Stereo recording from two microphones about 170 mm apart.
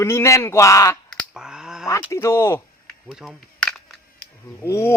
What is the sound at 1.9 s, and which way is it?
Speech, 15° left (ahead or behind).